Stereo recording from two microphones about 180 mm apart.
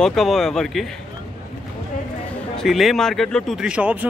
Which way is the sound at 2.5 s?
Centre (ahead or behind).